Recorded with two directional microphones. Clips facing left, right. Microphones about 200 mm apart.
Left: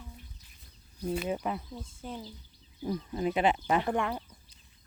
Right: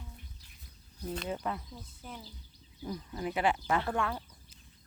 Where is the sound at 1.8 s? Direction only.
25° left (ahead or behind).